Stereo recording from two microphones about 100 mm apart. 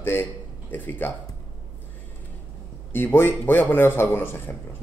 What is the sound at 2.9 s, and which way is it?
A man's voice, 20° left (ahead or behind).